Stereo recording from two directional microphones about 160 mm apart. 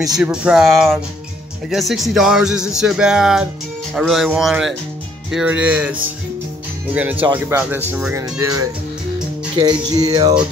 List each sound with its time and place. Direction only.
0.2 s speech: 5° right (ahead or behind); by 10.4 s 25° right (ahead or behind)